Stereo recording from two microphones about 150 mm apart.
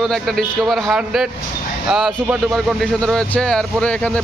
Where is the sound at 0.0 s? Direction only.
5° left (ahead or behind).